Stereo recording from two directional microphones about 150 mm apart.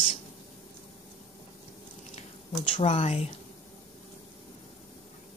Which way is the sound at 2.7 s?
45° left (ahead or behind).